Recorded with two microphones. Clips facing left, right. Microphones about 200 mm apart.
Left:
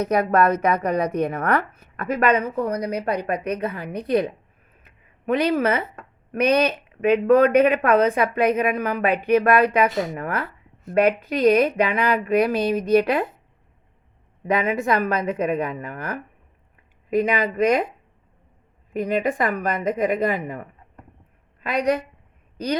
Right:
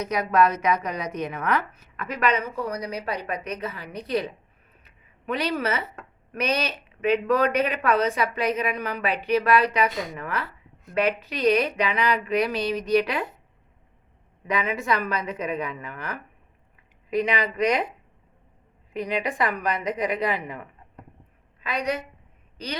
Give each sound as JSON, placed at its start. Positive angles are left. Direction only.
{"t": 0.0, "sound": "a woman's voice", "side_deg": 55}
{"t": 4.8, "sound": "a sound", "side_deg": 50}
{"t": 6.4, "sound": "a woman's voice", "side_deg": 55}
{"t": 14.4, "sound": "a woman's voice", "side_deg": 50}
{"t": 18.9, "sound": "a woman's voice", "side_deg": 45}